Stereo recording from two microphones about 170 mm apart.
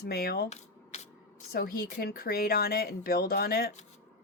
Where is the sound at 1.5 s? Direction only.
60° left (ahead or behind).